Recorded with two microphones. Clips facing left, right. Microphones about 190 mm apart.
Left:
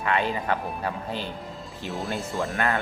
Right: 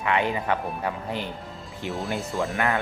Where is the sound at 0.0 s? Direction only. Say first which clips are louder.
Right 1 dB; 15° right (ahead or behind).